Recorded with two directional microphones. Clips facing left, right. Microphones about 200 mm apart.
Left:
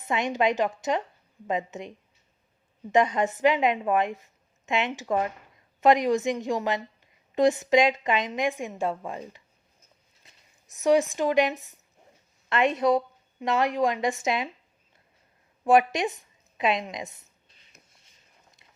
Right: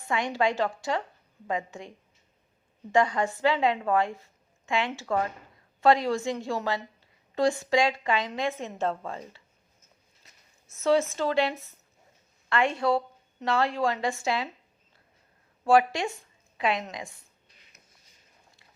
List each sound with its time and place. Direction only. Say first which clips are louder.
0.0 s a woman's voice: left 2 dB; 20° left (ahead or behind)
2.9 s a woman's voice: left 2 dB; 20° left (ahead or behind)
10.7 s a woman's voice: left 2 dB; 15° left (ahead or behind)
15.6 s a woman's voice: left 1 dB; 20° left (ahead or behind)